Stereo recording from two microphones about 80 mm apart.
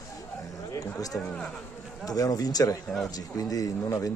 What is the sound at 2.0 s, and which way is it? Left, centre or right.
Speech, left.